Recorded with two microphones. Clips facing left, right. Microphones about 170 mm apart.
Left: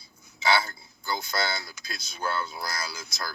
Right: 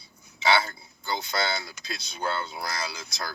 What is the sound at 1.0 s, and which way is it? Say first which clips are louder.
A man's voice: right 1 dB; 25° right (ahead or behind).